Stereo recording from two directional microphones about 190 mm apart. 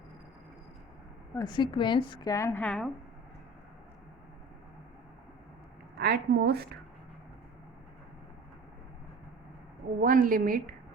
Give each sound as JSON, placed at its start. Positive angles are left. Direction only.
{"t": 1.4, "sound": "a woman's voice", "side_deg": 20}
{"t": 6.0, "sound": "a woman's voice", "side_deg": -55}
{"t": 10.0, "sound": "a woman's voice", "side_deg": -45}